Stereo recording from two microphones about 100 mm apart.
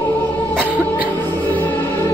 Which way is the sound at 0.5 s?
15° right (ahead or behind).